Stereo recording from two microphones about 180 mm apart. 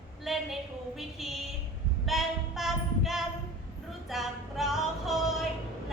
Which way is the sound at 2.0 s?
Centre (ahead or behind).